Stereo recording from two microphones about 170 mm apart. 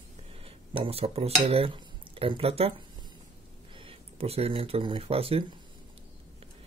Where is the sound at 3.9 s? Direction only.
35° right (ahead or behind).